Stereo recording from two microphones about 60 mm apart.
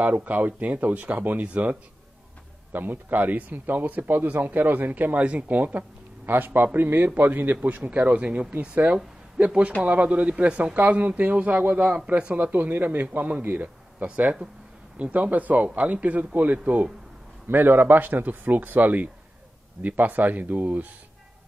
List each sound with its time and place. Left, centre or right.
0.0 s a man's voice: right
17.5 s a man's voice: right